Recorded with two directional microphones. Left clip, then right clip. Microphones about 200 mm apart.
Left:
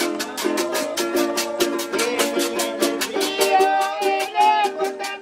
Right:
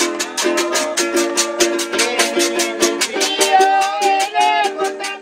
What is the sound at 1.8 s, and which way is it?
Music, 40° right (ahead or behind).